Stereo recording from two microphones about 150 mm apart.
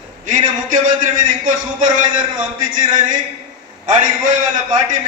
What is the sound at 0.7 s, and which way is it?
A man's voice, 60° right (ahead or behind).